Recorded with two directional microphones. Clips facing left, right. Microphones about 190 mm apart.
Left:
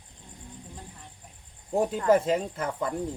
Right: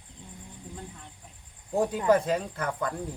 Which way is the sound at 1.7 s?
25° left (ahead or behind).